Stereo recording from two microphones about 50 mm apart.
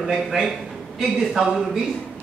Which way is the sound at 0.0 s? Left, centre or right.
Centre.